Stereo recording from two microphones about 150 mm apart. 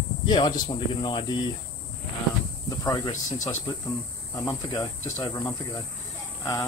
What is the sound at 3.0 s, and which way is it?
Speech, 55° left (ahead or behind).